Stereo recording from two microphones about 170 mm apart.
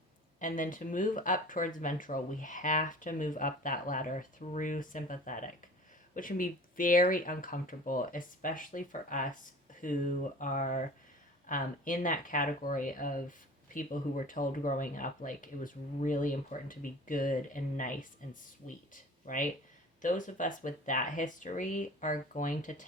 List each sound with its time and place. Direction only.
0.3 s speech: 50° left (ahead or behind)
19.2 s speech: 50° left (ahead or behind)